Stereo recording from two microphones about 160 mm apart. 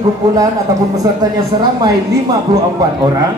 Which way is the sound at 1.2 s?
25° right (ahead or behind).